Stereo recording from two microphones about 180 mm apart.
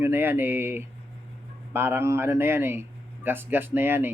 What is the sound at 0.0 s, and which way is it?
A man's voice, 10° right (ahead or behind).